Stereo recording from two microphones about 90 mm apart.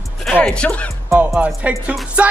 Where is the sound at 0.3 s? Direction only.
10° left (ahead or behind).